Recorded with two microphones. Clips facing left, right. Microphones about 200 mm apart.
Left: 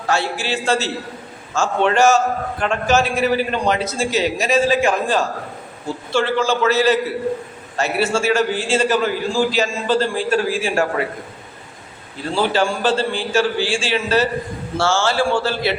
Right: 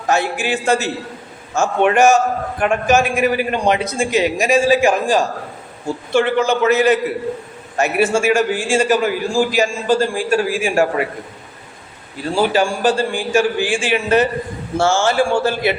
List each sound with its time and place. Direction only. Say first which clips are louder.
0.1 s a man's voice: right 3 dB; 15° right (ahead or behind)
12.3 s a man's voice: right 2 dB; 15° right (ahead or behind)